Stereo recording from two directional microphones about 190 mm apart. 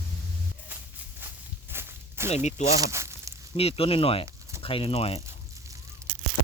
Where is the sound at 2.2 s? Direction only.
35° left (ahead or behind).